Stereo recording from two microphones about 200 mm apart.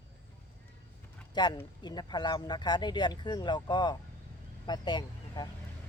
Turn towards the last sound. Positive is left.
turn(degrees=20)  # may be behind; listen again after turning